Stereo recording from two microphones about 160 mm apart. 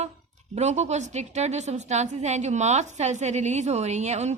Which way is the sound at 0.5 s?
45° right (ahead or behind).